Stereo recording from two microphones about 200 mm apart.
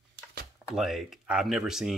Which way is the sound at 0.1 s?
50° right (ahead or behind).